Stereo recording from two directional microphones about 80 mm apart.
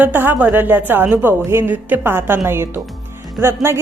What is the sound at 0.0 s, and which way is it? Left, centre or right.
A woman's voice, right.